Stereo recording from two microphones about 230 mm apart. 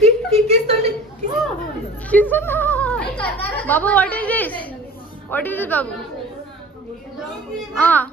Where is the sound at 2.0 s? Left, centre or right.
Centre.